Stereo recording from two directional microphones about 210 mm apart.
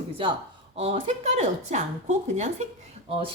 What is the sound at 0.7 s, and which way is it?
A woman's voice, 30° right (ahead or behind).